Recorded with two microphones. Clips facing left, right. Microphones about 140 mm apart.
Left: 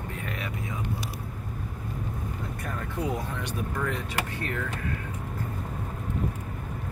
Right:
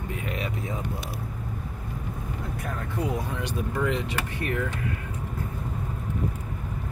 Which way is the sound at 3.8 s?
15° right (ahead or behind).